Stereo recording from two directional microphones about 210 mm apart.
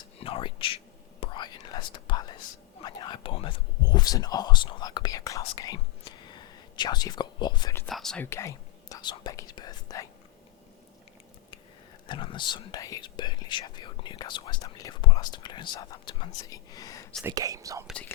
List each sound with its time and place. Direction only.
0.2 s speech: 25° left (ahead or behind)
1.2 s whispering: 20° left (ahead or behind)
2.8 s speech: 20° left (ahead or behind)
7.9 s speech: centre (ahead or behind); by 10.1 s 20° left (ahead or behind)
12.0 s speech: 25° left (ahead or behind)
17.2 s speech: 15° right (ahead or behind)
17.8 s speech: 5° left (ahead or behind)